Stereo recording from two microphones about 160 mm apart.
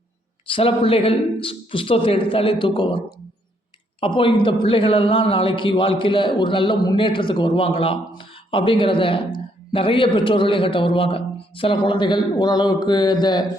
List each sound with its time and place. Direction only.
0.4 s a man's voice: 35° left (ahead or behind)
4.0 s a man's voice: 35° left (ahead or behind)